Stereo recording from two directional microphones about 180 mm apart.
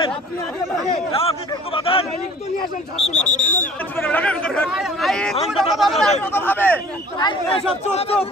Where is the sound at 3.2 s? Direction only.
45° left (ahead or behind).